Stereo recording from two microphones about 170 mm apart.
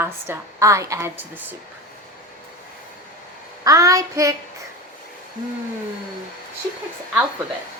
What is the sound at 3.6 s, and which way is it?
Speech, 20° right (ahead or behind).